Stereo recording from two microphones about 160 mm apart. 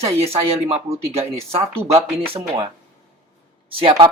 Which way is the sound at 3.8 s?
35° right (ahead or behind).